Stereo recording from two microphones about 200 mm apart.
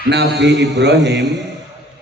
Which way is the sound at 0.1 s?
60° right (ahead or behind).